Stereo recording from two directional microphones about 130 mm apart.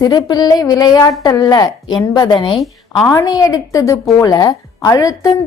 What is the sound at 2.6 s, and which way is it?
Speech, centre (ahead or behind).